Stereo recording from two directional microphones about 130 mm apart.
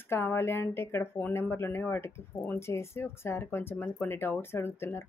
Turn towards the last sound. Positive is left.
turn(degrees=20)  # may be behind; listen again after turning